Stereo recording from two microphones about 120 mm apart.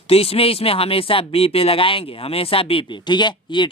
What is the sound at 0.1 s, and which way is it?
Speech, 55° left (ahead or behind).